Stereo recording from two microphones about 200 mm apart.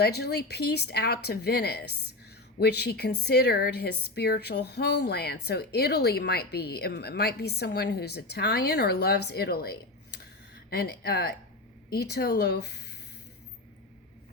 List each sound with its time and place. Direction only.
0.0 s a woman's voice: 55° left (ahead or behind)